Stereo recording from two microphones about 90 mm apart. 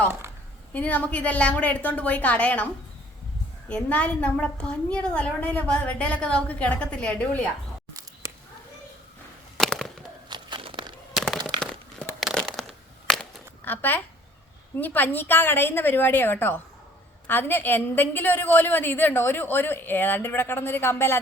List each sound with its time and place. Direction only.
0.7 s a woman's voice: 15° left (ahead or behind)
3.7 s a woman's voice: 15° left (ahead or behind)
9.6 s a sound: centre (ahead or behind)
10.2 s a sound: 60° right (ahead or behind)
12.3 s crushing: 5° left (ahead or behind)
13.7 s a woman's voice: 20° left (ahead or behind)